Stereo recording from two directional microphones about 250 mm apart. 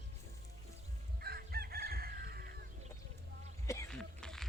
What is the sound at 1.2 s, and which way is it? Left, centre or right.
Chicken, right.